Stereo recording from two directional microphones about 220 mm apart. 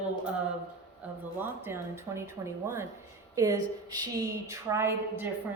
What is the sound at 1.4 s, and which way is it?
A woman's voice, 10° right (ahead or behind).